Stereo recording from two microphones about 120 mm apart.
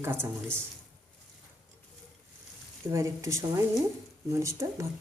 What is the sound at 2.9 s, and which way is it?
Speech, 25° right (ahead or behind).